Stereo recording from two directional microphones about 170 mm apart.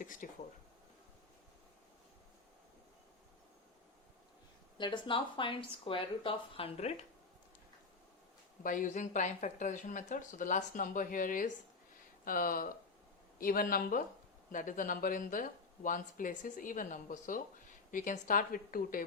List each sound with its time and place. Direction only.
0.0 s speech: 50° left (ahead or behind)
4.8 s speech: 30° left (ahead or behind)
8.6 s speech: 50° left (ahead or behind)